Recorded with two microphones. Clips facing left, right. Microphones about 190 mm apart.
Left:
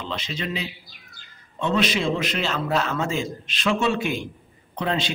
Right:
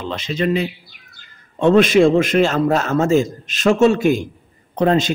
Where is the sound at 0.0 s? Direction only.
50° right (ahead or behind).